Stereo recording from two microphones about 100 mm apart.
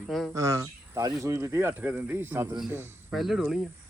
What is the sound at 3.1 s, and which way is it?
Speech, centre (ahead or behind).